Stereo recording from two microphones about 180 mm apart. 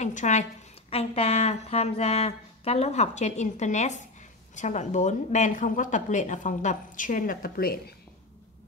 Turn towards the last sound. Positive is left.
turn(degrees=55)  # may be behind; listen again after turning